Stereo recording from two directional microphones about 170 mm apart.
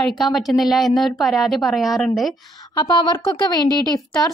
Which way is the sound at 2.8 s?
25° left (ahead or behind).